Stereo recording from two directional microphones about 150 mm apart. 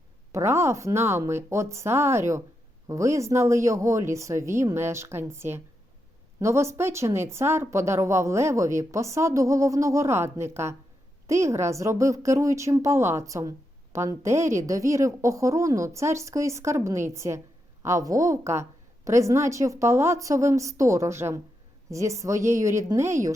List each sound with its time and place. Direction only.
0.3 s speech: 20° right (ahead or behind)